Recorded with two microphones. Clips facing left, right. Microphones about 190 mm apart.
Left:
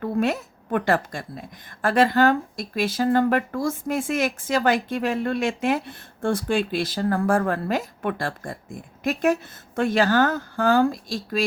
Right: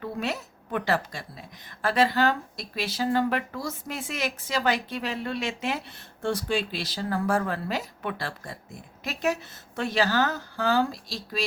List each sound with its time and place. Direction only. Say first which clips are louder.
0.0 s a woman's voice: left 8 dB; 50° left (ahead or behind)